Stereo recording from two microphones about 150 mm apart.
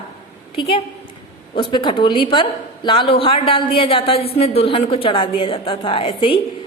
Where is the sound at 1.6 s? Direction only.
35° left (ahead or behind).